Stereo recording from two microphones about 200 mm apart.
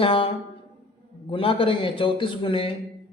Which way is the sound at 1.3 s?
25° left (ahead or behind).